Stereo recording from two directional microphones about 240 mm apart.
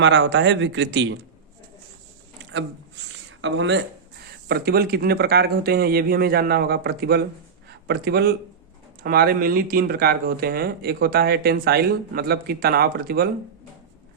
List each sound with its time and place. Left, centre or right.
0.0 s speech: right
2.5 s a sound: right
3.4 s a man's voice: right